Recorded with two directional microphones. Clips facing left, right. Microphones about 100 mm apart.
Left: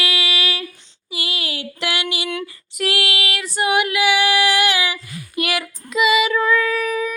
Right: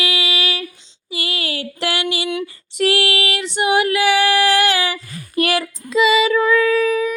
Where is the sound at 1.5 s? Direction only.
35° right (ahead or behind).